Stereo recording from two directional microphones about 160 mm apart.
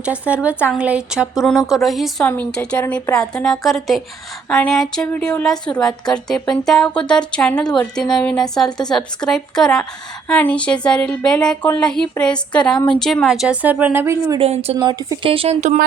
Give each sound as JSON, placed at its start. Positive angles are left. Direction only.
{"t": 0.0, "sound": "speech", "side_deg": -10}
{"t": 2.2, "sound": "speech", "side_deg": 10}
{"t": 14.3, "sound": "speech", "side_deg": -40}
{"t": 14.8, "sound": "speech", "side_deg": -25}